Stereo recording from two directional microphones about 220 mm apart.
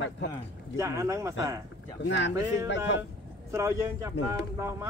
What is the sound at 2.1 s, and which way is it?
Speech, 55° left (ahead or behind).